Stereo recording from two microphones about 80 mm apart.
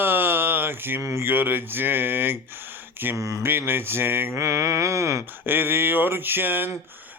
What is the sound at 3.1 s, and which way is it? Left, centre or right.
Speech, right.